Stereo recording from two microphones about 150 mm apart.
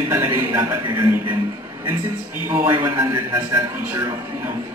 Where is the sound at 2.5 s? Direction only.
15° right (ahead or behind).